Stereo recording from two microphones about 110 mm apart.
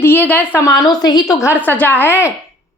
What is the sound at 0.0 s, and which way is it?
Speech, 15° left (ahead or behind).